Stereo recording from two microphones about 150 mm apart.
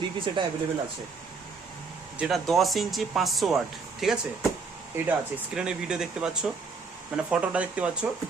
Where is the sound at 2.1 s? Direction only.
Centre (ahead or behind).